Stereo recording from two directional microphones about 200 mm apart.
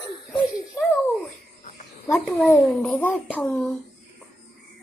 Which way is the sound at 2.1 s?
5° left (ahead or behind).